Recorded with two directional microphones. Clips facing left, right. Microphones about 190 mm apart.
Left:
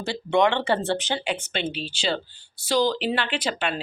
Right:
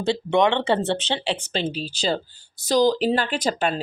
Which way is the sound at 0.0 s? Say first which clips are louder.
Right 2 dB; 20° right (ahead or behind).